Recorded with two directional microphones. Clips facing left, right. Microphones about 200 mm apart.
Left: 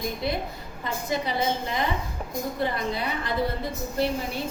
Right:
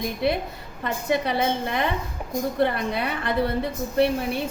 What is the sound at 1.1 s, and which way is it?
A woman's voice, 60° right (ahead or behind).